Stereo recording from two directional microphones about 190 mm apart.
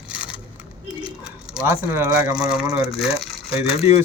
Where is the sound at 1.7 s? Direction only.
15° right (ahead or behind).